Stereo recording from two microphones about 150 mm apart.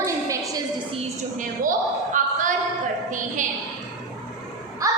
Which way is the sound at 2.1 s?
60° right (ahead or behind).